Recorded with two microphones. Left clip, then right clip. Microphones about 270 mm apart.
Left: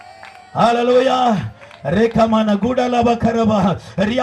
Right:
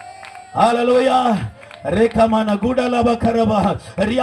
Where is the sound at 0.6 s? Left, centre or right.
Left.